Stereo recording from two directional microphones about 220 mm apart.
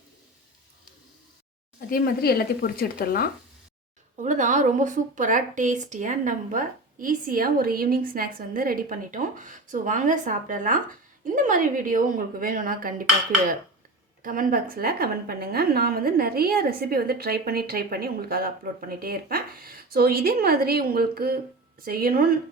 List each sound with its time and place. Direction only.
1.9 s speech: 45° left (ahead or behind)
4.2 s a woman's voice: 35° right (ahead or behind)
14.2 s a woman's voice: 40° right (ahead or behind)